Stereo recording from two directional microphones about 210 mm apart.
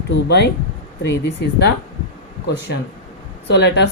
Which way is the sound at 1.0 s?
55° left (ahead or behind).